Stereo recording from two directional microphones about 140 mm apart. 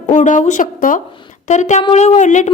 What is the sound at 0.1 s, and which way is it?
Speech, 65° left (ahead or behind).